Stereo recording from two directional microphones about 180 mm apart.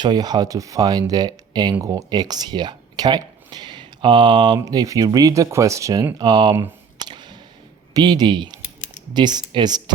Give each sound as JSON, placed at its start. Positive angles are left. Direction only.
{"t": 0.0, "sound": "speech", "side_deg": -25}
{"t": 6.1, "sound": "a sound", "side_deg": -25}
{"t": 7.9, "sound": "speech", "side_deg": -20}